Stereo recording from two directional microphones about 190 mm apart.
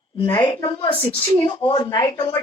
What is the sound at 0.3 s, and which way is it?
A woman's voice, 15° left (ahead or behind).